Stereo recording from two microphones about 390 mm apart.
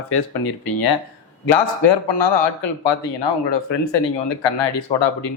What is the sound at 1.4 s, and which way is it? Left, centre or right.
Speech, left.